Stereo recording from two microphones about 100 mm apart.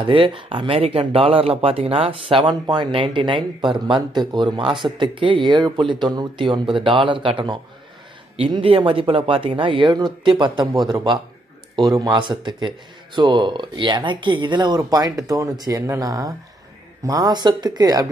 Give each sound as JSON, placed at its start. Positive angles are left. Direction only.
{"t": 0.0, "sound": "speech", "side_deg": -60}
{"t": 2.6, "sound": "speech", "side_deg": -45}
{"t": 2.9, "sound": "speech", "side_deg": -55}
{"t": 11.7, "sound": "speech", "side_deg": -40}
{"t": 12.2, "sound": "speech", "side_deg": -50}